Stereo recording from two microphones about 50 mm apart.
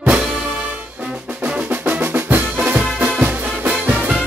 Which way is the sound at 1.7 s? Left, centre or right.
Right.